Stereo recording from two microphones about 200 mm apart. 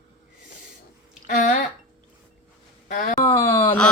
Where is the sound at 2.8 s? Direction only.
40° left (ahead or behind).